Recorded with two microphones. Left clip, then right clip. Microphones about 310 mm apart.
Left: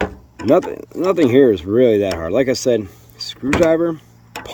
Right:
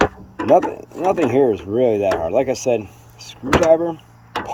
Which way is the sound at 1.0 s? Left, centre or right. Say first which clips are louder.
Left 2 dB; left.